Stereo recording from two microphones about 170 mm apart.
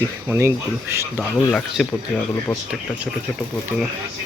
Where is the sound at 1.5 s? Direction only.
5° left (ahead or behind).